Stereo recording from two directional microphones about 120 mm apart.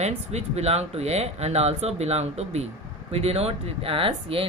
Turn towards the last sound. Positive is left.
turn(degrees=-50)  # may be behind; listen again after turning